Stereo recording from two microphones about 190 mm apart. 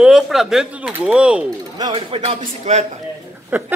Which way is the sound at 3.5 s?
10° right (ahead or behind).